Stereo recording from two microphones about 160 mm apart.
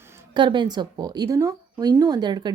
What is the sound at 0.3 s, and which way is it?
Speech, 30° right (ahead or behind).